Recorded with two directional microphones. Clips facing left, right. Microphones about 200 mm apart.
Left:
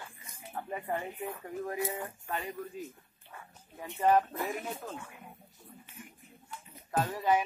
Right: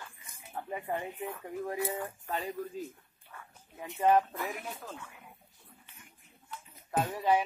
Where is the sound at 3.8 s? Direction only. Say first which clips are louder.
Even; 20° right (ahead or behind).